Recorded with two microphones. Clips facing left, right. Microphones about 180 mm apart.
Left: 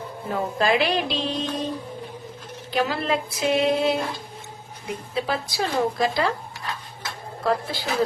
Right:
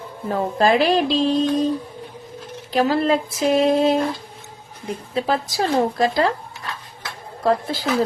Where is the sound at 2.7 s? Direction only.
40° right (ahead or behind).